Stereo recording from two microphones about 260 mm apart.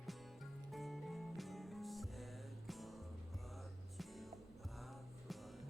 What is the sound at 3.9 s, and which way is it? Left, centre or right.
Music, centre.